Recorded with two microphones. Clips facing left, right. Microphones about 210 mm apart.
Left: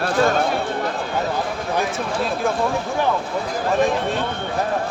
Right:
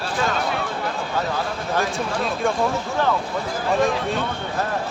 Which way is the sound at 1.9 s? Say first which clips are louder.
Left 1 dB; centre (ahead or behind).